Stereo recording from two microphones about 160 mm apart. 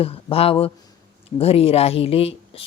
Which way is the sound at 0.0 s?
35° left (ahead or behind).